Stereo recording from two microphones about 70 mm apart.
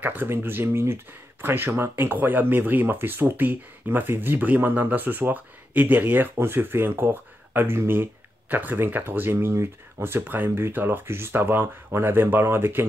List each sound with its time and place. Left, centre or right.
0.0 s speech: right